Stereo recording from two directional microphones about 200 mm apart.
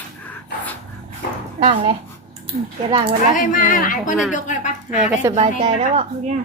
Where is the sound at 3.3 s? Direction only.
40° left (ahead or behind).